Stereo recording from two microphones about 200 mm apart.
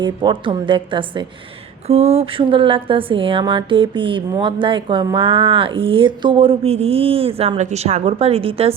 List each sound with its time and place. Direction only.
0.0 s a woman's voice: 25° right (ahead or behind)